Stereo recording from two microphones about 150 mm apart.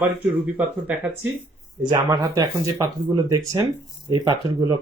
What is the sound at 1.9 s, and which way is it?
Speech, 25° right (ahead or behind).